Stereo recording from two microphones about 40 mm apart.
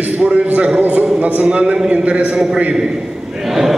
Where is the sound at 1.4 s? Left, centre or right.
Right.